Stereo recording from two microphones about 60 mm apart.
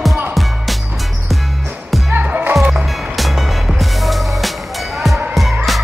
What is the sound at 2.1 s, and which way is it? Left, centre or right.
Music, right.